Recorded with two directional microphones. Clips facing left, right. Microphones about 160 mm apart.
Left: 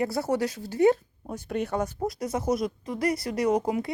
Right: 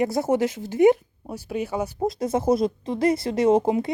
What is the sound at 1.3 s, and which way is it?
Speech, 5° right (ahead or behind).